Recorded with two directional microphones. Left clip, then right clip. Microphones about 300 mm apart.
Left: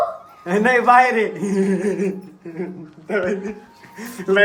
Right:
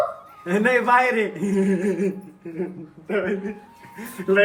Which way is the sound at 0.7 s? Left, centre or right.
Centre.